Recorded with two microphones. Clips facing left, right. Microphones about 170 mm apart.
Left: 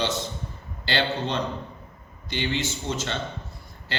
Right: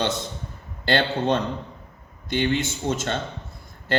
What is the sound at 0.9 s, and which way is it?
A man's voice, 50° right (ahead or behind).